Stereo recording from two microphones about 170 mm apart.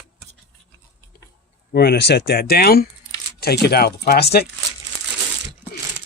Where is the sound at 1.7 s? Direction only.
70° left (ahead or behind).